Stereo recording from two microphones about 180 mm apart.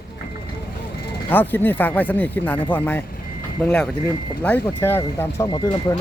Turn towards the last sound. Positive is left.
turn(degrees=20)  # may be behind; listen again after turning